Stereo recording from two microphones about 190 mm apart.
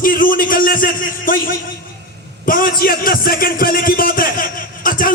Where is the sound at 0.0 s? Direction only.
50° left (ahead or behind).